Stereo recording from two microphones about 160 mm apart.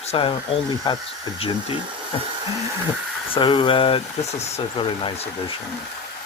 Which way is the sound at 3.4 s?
30° left (ahead or behind).